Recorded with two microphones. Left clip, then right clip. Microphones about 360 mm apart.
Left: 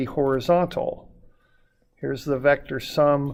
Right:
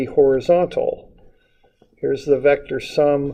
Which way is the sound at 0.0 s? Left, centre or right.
Left.